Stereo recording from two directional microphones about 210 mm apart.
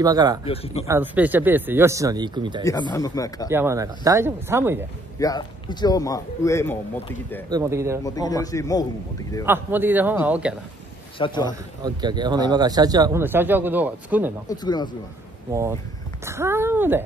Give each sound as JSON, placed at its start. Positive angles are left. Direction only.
{"t": 0.0, "sound": "speech", "side_deg": -20}
{"t": 0.5, "sound": "speech", "side_deg": 30}
{"t": 0.8, "sound": "speech", "side_deg": -10}
{"t": 2.6, "sound": "speech", "side_deg": 15}
{"t": 3.4, "sound": "speech", "side_deg": -10}
{"t": 5.2, "sound": "speech", "side_deg": 20}
{"t": 7.4, "sound": "speech", "side_deg": -15}
{"t": 8.0, "sound": "speech", "side_deg": 15}
{"t": 9.5, "sound": "speech", "side_deg": -10}
{"t": 11.1, "sound": "speech", "side_deg": 20}
{"t": 11.8, "sound": "speech", "side_deg": -20}
{"t": 14.5, "sound": "speech", "side_deg": 20}
{"t": 16.3, "sound": "speech", "side_deg": -10}